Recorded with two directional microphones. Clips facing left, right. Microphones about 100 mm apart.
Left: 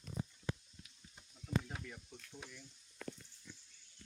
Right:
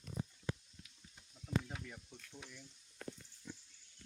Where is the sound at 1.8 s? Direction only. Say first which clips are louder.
Left 1 dB; 5° right (ahead or behind).